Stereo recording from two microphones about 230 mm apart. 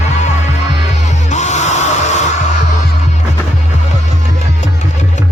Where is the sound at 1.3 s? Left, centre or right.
Left.